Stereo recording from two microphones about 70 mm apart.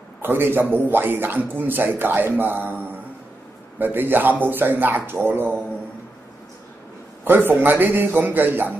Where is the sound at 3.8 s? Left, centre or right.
Right.